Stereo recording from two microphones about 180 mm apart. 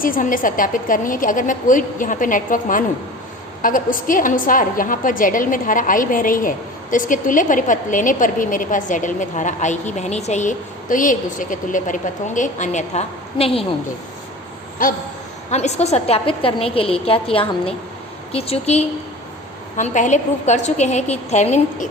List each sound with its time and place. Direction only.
0.0 s a woman's voice: 50° left (ahead or behind); by 13.7 s 30° left (ahead or behind)
14.8 s a woman's voice: 50° left (ahead or behind)
15.4 s a woman's voice: 40° left (ahead or behind)